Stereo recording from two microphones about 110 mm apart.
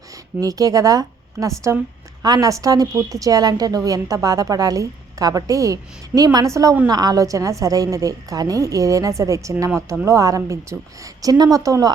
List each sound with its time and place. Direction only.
0.3 s a woman's voice: 35° right (ahead or behind)